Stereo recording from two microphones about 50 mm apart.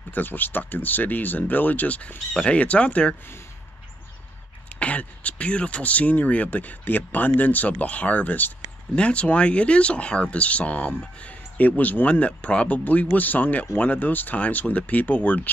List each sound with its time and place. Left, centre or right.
0.1 s speech: left
4.7 s speech: left
8.9 s speech: left